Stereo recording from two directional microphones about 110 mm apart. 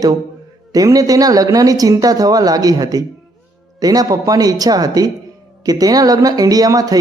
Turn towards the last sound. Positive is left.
turn(degrees=-35)  # may be behind; listen again after turning